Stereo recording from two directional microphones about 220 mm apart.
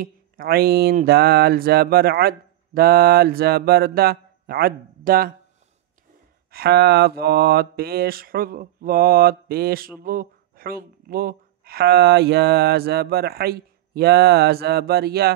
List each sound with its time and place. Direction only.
0.0 s mantra: 40° right (ahead or behind)
6.5 s mantra: 45° right (ahead or behind)